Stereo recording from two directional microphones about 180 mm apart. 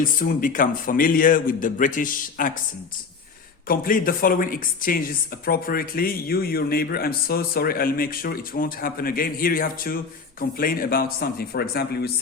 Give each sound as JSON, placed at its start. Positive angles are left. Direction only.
{"t": 0.0, "sound": "a man's voice", "side_deg": 50}
{"t": 3.7, "sound": "speech", "side_deg": 50}